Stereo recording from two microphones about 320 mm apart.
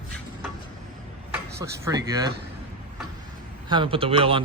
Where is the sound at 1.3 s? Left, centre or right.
Centre.